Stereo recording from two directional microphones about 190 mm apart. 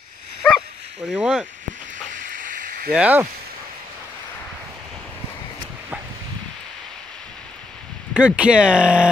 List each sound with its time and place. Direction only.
1.0 s speech: 5° right (ahead or behind)
2.1 s hiss: 45° right (ahead or behind)
2.9 s speech: 5° right (ahead or behind)
8.1 s speech: 5° right (ahead or behind)